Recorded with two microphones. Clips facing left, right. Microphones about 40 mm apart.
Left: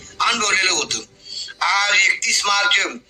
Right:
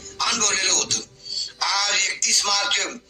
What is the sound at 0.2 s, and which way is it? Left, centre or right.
A man's voice, left.